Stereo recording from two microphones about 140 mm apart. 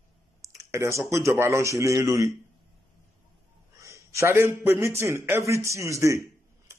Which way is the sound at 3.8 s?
20° right (ahead or behind).